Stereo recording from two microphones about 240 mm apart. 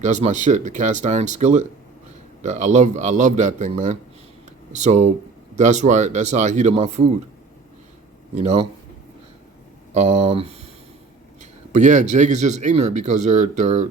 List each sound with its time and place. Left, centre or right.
0.0 s speech: right
8.4 s speech: right
9.9 s speech: right
11.7 s speech: right